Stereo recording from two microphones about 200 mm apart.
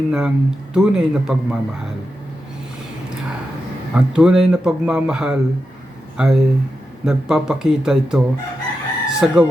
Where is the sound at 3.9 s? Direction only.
5° right (ahead or behind).